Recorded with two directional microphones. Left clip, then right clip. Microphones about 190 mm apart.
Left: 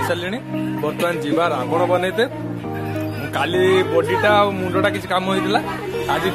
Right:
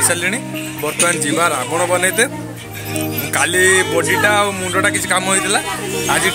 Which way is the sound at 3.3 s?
5° right (ahead or behind).